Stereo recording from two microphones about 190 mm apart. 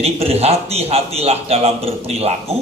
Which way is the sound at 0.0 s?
30° right (ahead or behind).